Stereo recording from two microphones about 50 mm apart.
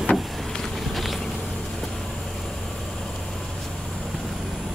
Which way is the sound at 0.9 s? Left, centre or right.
Centre.